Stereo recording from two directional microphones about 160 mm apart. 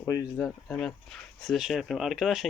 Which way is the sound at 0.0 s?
20° left (ahead or behind).